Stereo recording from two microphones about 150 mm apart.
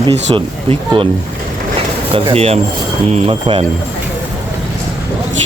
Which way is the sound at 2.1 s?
40° right (ahead or behind).